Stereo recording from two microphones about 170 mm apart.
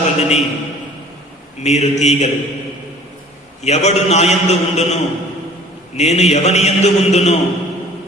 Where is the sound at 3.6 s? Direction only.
40° left (ahead or behind).